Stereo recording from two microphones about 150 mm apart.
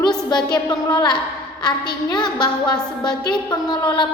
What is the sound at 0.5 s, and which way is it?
A woman's voice, 30° left (ahead or behind).